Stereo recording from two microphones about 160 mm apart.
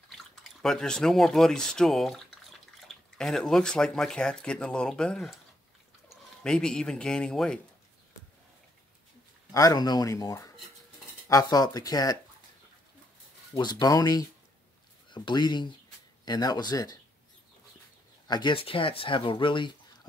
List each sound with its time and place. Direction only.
0.4 s speech: 5° left (ahead or behind)
9.5 s speech: 20° left (ahead or behind)
13.6 s speech: 25° left (ahead or behind)
18.3 s speech: 30° left (ahead or behind)